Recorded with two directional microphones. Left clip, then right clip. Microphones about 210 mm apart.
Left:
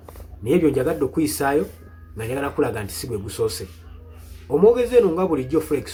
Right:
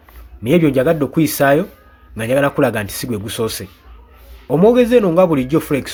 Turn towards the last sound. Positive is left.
turn(degrees=-50)  # may be behind; listen again after turning